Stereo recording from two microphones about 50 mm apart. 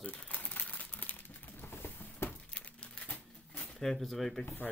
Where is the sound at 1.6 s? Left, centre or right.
Left.